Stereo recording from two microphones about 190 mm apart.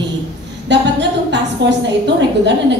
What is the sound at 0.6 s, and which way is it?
A woman's voice, 65° right (ahead or behind).